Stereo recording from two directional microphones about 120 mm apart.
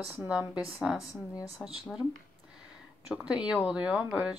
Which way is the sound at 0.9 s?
30° left (ahead or behind).